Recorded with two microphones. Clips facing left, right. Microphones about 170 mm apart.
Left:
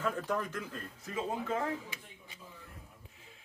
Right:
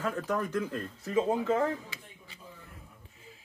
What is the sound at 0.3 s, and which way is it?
Speech, 45° right (ahead or behind).